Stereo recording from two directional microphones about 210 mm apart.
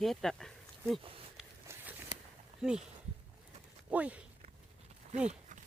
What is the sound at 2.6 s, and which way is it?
Speech, 5° right (ahead or behind).